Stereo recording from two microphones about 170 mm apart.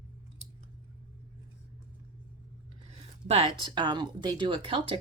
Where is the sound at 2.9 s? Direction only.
35° right (ahead or behind).